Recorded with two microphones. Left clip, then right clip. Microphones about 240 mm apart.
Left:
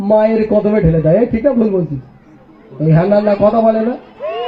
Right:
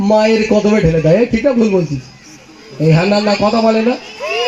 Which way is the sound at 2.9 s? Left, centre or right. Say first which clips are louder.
Left 3 dB; right.